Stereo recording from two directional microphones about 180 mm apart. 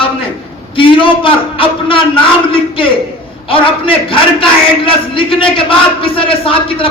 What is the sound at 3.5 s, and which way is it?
A man's voice, 30° left (ahead or behind).